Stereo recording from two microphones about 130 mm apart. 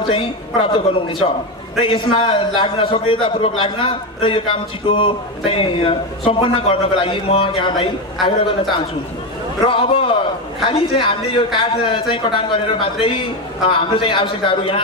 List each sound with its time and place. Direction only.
0.1 s a man's voice: 45° left (ahead or behind)
9.7 s a man's voice: 45° left (ahead or behind)